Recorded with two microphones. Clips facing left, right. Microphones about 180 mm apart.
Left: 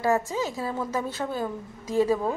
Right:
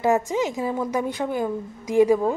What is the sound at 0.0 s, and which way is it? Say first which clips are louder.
A woman's voice: right 4 dB; 20° right (ahead or behind).